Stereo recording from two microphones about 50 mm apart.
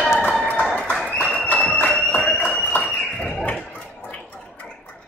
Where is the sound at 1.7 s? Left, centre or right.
Centre.